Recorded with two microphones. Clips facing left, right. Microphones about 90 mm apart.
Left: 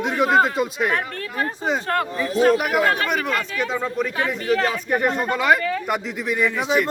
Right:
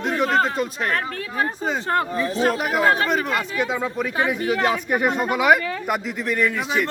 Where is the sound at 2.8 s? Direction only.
30° right (ahead or behind).